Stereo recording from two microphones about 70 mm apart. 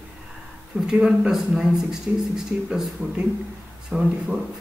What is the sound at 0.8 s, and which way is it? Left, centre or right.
Speech, centre.